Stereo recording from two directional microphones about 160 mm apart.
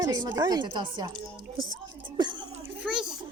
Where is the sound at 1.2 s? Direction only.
30° right (ahead or behind).